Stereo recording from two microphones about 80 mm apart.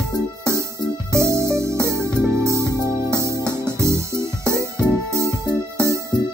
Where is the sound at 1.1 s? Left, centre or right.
Right.